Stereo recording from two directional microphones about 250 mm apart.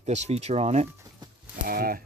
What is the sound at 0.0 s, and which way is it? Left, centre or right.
Speech, right.